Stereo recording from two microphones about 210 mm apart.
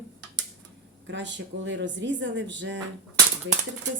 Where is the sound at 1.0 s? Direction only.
60° right (ahead or behind).